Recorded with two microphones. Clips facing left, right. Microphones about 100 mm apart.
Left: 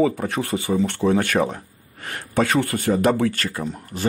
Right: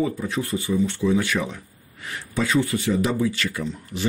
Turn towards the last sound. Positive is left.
turn(degrees=45)  # may be behind; listen again after turning